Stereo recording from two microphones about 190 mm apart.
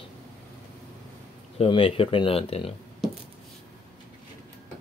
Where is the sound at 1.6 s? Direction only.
30° left (ahead or behind).